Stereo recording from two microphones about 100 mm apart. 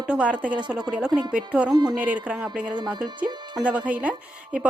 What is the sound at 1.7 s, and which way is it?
Speech, 45° right (ahead or behind).